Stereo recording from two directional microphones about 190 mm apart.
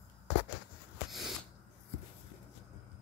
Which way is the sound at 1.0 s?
Centre (ahead or behind).